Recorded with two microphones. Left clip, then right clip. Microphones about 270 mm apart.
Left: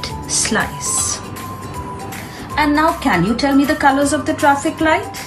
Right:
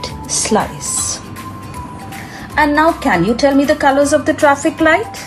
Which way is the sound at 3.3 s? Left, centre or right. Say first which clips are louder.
Right 3 dB; right.